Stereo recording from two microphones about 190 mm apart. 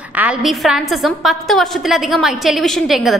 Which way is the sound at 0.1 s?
5° right (ahead or behind).